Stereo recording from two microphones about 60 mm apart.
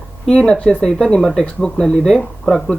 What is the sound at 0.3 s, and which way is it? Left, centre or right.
Speech, centre.